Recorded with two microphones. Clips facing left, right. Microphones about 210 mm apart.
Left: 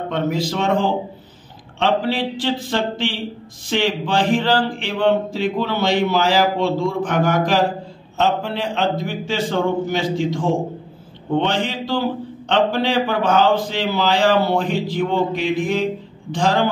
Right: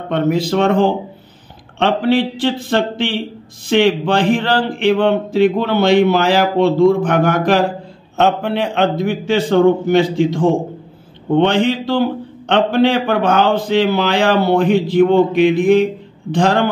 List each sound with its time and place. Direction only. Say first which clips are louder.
0.1 s speech: right 7 dB; 60° right (ahead or behind)
11.3 s speech: right 7 dB; 60° right (ahead or behind)